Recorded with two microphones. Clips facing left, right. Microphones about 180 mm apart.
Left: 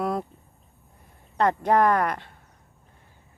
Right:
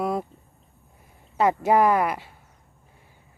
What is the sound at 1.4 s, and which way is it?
Speech, 5° right (ahead or behind).